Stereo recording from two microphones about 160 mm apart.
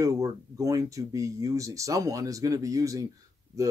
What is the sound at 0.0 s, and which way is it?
Speech, 20° right (ahead or behind).